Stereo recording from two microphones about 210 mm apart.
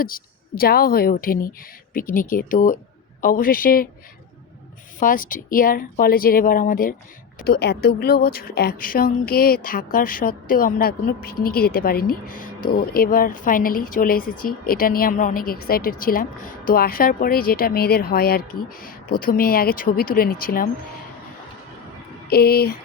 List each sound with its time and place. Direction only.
0.0 s speech: 45° left (ahead or behind)
4.9 s speech: 40° left (ahead or behind)
22.3 s speech: 45° left (ahead or behind)